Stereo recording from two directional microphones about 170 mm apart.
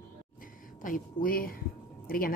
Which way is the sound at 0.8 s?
55° left (ahead or behind).